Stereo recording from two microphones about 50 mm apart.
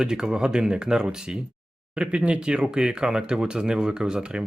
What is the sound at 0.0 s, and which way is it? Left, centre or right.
Speech, centre.